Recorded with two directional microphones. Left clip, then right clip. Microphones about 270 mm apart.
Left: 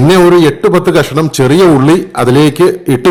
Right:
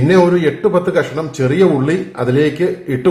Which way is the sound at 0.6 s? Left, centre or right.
Left.